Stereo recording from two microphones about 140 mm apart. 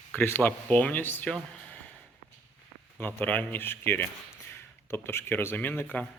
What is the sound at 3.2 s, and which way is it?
Speech, 15° left (ahead or behind).